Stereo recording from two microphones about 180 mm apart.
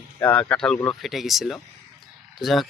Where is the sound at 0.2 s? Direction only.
10° left (ahead or behind).